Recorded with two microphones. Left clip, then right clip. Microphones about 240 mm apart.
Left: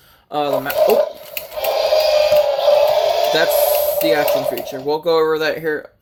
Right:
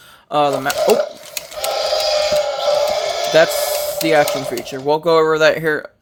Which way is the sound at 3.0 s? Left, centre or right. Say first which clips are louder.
Left 4 dB; centre.